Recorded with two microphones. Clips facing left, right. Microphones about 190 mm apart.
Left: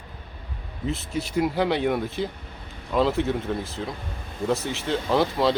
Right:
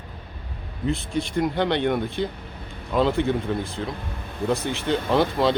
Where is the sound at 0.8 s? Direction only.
Centre (ahead or behind).